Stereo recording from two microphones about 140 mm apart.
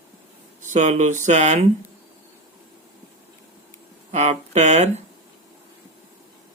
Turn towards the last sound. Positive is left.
turn(degrees=-55)  # may be behind; listen again after turning